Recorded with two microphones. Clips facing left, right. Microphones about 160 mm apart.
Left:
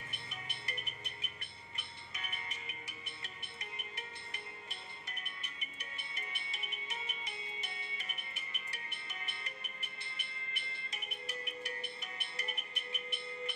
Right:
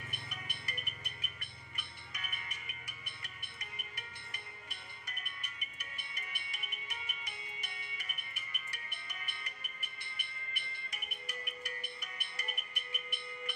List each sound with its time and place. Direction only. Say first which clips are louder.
0.3 s music: even; 25° left (ahead or behind)